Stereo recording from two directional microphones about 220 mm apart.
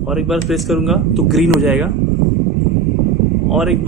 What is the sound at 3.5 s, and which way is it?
Speech, centre (ahead or behind).